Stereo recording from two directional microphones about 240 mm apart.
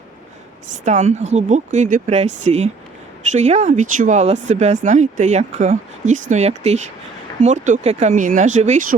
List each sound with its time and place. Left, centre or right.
0.9 s speech: right